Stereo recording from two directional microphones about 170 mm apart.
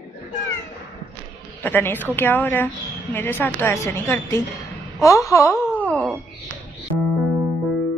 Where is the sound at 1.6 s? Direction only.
10° left (ahead or behind).